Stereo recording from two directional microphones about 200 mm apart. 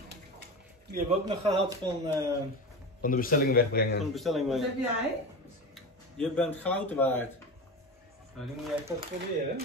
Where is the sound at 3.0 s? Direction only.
45° left (ahead or behind).